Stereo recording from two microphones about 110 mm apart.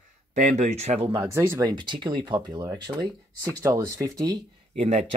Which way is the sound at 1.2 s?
25° right (ahead or behind).